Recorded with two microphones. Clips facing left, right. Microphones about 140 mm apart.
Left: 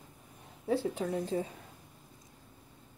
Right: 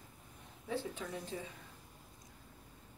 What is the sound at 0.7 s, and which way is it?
Speech, 35° left (ahead or behind).